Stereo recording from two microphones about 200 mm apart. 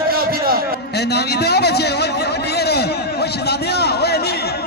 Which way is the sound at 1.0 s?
55° left (ahead or behind).